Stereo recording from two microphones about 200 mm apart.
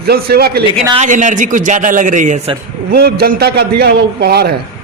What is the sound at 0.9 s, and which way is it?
A man's voice, 40° right (ahead or behind).